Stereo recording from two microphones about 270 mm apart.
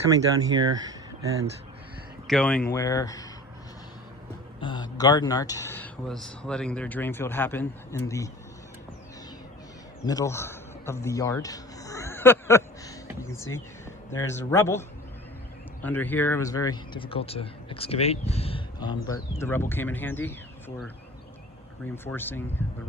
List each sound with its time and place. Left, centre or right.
0.3 s speech: centre
2.2 s speech: centre
4.6 s speech: centre
10.1 s a man's voice: centre
22.0 s speech: centre